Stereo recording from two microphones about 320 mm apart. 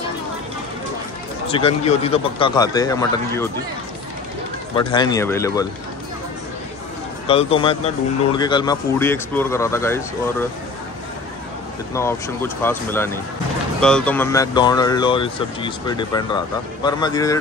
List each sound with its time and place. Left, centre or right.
1.5 s a man's voice: centre
4.7 s a man's voice: centre
7.2 s a man's voice: centre
11.9 s a man's voice: centre